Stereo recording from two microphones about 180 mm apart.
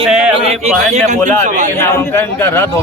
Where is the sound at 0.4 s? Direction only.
35° right (ahead or behind).